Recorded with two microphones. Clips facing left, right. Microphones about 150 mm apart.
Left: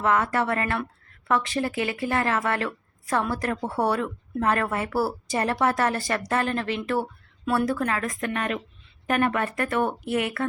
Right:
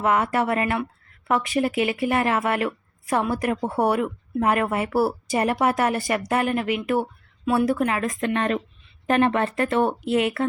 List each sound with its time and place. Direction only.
0.0 s speech: 20° right (ahead or behind)